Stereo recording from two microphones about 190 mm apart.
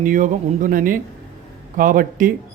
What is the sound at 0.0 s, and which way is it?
Speech, 45° right (ahead or behind).